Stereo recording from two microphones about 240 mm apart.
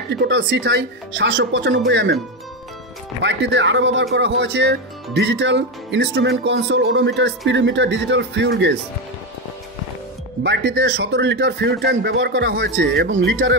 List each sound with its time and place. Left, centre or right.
0.1 s speech: right
3.3 s speech: right
10.4 s speech: right